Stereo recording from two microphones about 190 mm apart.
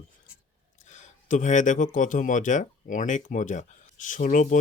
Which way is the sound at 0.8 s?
40° left (ahead or behind).